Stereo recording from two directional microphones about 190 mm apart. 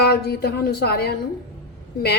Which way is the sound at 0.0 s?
55° left (ahead or behind).